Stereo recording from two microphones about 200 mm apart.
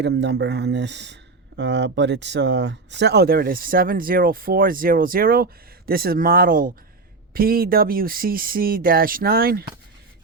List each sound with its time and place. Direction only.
0.0 s speech: 60° right (ahead or behind)